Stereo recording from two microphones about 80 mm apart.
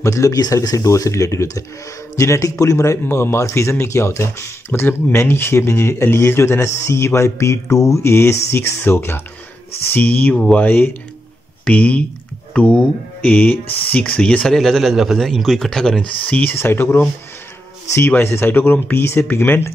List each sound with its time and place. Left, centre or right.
0.0 s a man's voice: left; by 16.5 s centre
16.5 s speech: left